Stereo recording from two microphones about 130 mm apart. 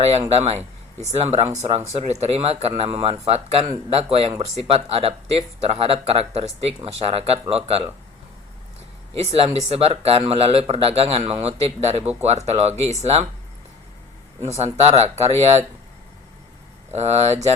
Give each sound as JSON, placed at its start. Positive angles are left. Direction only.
{"t": 0.1, "sound": "a man's voice", "side_deg": -55}
{"t": 9.4, "sound": "a man's voice", "side_deg": -50}
{"t": 14.4, "sound": "speech", "side_deg": -55}
{"t": 16.9, "sound": "speech", "side_deg": -55}